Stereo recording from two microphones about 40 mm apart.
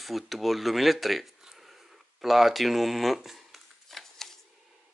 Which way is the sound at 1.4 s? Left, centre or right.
Centre.